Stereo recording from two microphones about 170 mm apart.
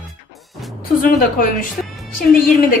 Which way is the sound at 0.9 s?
55° left (ahead or behind).